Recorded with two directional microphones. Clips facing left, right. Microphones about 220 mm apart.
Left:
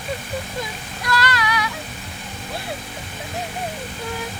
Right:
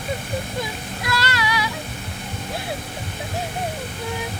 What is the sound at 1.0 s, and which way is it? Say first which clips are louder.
Music: left 2 dB; 30° right (ahead or behind).